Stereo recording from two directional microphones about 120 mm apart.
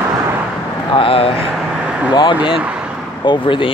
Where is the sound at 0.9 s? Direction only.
50° left (ahead or behind).